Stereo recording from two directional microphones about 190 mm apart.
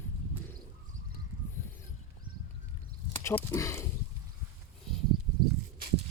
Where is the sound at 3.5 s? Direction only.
15° left (ahead or behind).